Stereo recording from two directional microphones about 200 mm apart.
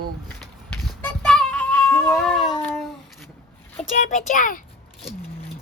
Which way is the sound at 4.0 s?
40° left (ahead or behind).